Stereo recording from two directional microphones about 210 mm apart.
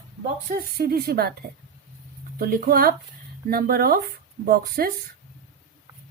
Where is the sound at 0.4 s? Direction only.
45° right (ahead or behind).